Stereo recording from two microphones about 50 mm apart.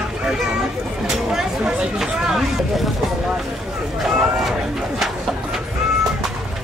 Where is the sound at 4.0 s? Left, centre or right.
Centre.